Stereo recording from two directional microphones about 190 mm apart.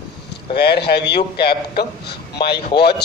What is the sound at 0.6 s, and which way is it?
Speech, 60° left (ahead or behind).